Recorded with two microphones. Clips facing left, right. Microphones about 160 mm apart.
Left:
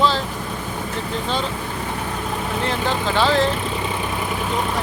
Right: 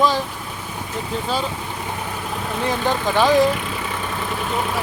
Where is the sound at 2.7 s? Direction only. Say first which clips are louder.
Right 3 dB; 15° right (ahead or behind).